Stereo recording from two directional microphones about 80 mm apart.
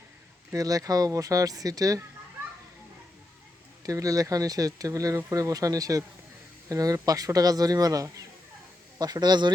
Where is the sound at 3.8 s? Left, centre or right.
Right.